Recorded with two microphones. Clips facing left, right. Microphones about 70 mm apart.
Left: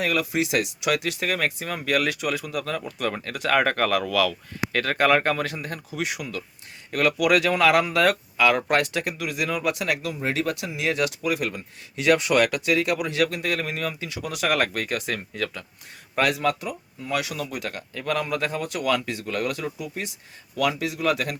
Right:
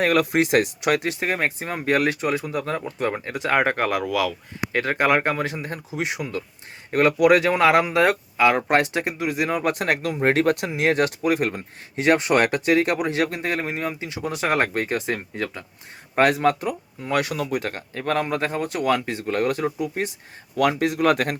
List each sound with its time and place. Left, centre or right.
0.0 s speech: right
16.1 s speech: right